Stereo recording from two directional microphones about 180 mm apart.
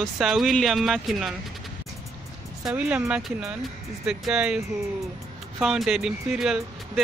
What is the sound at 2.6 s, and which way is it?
Speech, 5° right (ahead or behind).